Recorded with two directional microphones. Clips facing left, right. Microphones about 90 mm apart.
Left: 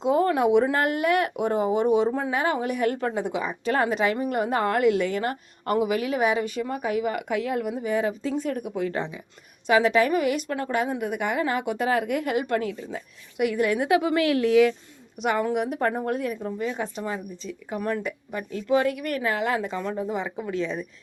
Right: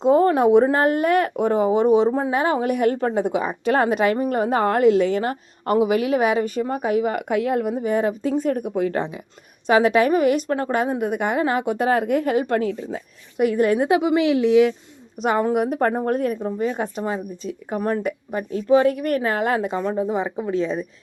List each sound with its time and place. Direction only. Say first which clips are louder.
0.0 s a woman's voice: right 5 dB; 35° right (ahead or behind); by 14.8 s 20° right (ahead or behind)
15.2 s a woman's voice: right 4 dB; 40° right (ahead or behind)
17.0 s a woman's voice: right 5 dB; 30° right (ahead or behind)
19.7 s a woman's voice: right 6 dB; 30° right (ahead or behind)